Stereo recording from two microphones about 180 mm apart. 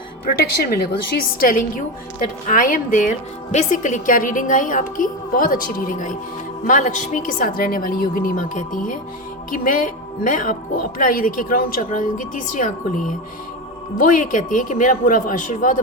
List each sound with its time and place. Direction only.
0.3 s a woman's voice: 60° left (ahead or behind)